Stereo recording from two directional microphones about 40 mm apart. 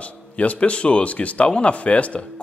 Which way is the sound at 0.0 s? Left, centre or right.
Left.